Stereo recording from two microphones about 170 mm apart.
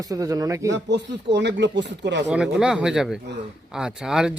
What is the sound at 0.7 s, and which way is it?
Speech, 90° right.